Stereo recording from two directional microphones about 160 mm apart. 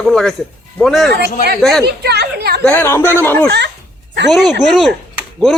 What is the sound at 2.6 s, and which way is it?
Speech, 10° left (ahead or behind).